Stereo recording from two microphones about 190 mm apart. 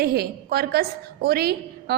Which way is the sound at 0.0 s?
55° right (ahead or behind).